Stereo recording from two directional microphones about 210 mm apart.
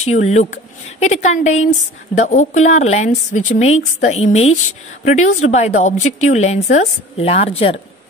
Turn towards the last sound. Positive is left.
turn(degrees=25)  # may be behind; listen again after turning